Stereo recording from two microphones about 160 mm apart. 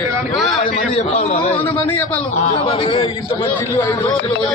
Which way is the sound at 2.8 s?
30° left (ahead or behind).